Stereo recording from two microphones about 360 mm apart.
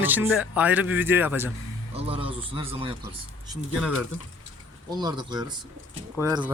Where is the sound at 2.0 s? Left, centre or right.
Centre.